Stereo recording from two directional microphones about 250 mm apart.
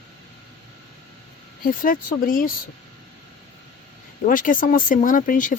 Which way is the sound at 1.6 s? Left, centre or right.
Left.